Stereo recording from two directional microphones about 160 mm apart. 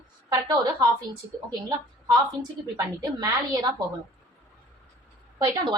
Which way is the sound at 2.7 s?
25° right (ahead or behind).